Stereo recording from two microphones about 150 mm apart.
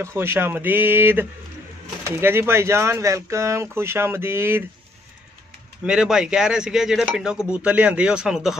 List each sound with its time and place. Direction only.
0.0 s speech: 15° right (ahead or behind)
5.9 s a man's voice: 5° right (ahead or behind)